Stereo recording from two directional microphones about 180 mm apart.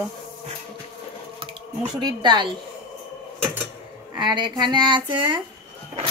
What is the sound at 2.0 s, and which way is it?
Child singing, 25° right (ahead or behind).